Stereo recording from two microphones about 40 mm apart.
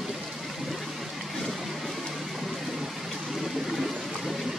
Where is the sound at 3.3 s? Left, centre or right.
Centre.